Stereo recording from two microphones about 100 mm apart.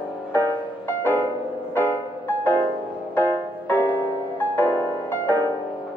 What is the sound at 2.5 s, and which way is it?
Music, 20° left (ahead or behind).